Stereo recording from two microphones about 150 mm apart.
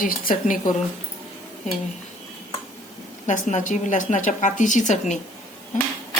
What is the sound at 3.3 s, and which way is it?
A woman's voice, 55° left (ahead or behind).